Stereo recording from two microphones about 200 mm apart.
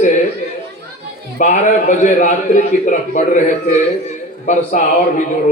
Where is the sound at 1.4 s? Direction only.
40° left (ahead or behind).